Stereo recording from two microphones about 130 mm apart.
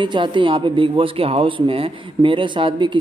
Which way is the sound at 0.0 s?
40° right (ahead or behind).